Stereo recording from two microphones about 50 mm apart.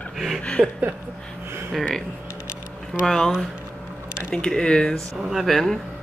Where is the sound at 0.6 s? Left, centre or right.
Right.